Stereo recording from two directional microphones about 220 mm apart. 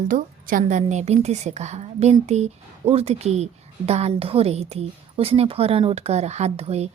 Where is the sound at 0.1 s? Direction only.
35° right (ahead or behind).